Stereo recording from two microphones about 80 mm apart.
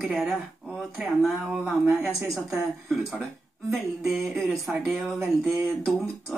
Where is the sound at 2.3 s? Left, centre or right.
Centre.